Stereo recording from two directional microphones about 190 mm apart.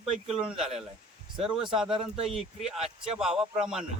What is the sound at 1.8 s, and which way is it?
Speech, 25° right (ahead or behind).